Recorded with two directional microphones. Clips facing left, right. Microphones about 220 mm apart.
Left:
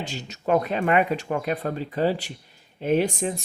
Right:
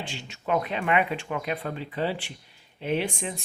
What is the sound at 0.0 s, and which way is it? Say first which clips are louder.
Speech: left 5 dB; 40° left (ahead or behind).